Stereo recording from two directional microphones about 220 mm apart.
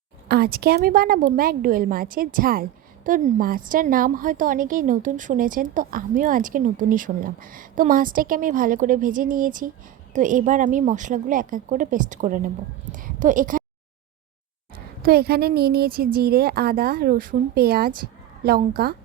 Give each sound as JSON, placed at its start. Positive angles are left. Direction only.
{"t": 0.3, "sound": "a woman's voice", "side_deg": -45}
{"t": 15.0, "sound": "speech", "side_deg": -45}